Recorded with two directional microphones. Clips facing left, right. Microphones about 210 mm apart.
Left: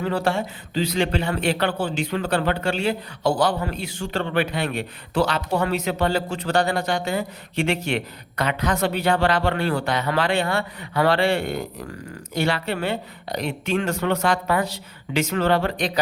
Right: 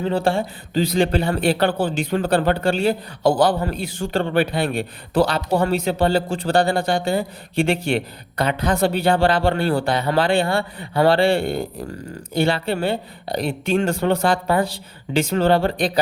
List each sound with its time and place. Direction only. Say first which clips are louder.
0.0 s a man's voice: right 3 dB; 25° right (ahead or behind)